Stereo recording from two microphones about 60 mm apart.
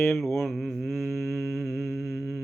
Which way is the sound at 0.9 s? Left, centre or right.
Left.